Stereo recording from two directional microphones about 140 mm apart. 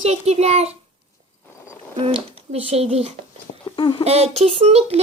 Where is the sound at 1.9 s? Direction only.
40° right (ahead or behind).